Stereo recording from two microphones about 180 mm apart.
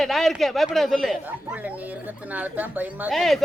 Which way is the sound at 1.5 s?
10° right (ahead or behind).